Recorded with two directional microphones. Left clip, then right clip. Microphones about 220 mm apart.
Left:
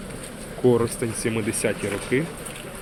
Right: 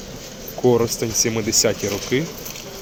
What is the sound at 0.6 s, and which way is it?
Speech, 15° right (ahead or behind).